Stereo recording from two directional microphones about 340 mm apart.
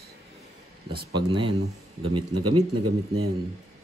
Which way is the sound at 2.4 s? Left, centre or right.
Right.